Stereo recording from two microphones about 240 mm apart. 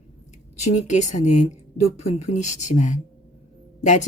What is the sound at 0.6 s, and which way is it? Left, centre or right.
A woman's voice, left.